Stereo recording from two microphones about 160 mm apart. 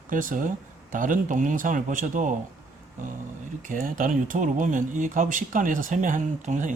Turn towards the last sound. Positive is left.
turn(degrees=-50)  # may be behind; listen again after turning